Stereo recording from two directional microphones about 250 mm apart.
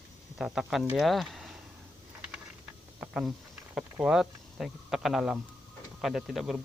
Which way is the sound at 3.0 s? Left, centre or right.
Centre.